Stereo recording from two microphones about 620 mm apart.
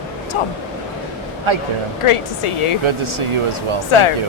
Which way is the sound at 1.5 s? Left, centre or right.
Right.